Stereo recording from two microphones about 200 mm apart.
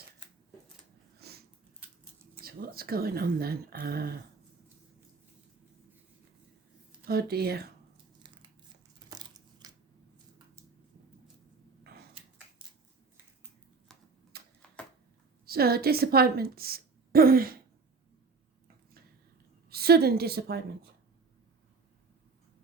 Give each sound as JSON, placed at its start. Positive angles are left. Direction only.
{"t": 1.2, "sound": "biting", "side_deg": -50}
{"t": 2.4, "sound": "speech", "side_deg": -50}
{"t": 7.1, "sound": "speech", "side_deg": -50}
{"t": 9.0, "sound": "crushing", "side_deg": -20}
{"t": 11.8, "sound": "a sound", "side_deg": -55}
{"t": 14.3, "sound": "a sound", "side_deg": -50}
{"t": 15.4, "sound": "a woman's voice", "side_deg": -50}
{"t": 19.7, "sound": "speech", "side_deg": -50}